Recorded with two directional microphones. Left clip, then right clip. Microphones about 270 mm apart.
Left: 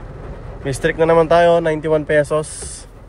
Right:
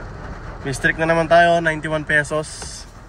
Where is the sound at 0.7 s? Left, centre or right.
Left.